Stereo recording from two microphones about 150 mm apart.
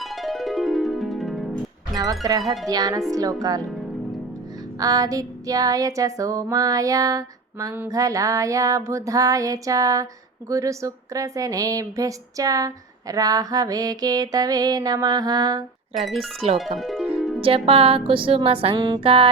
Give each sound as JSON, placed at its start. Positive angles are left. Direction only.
{"t": 0.0, "sound": "music", "side_deg": 0}
{"t": 1.9, "sound": "speech", "side_deg": -25}
{"t": 2.6, "sound": "a sound", "side_deg": -25}
{"t": 4.8, "sound": "a sound", "side_deg": -25}
{"t": 16.0, "sound": "speech", "side_deg": 0}
{"t": 16.7, "sound": "music", "side_deg": 0}
{"t": 17.4, "sound": "music", "side_deg": -40}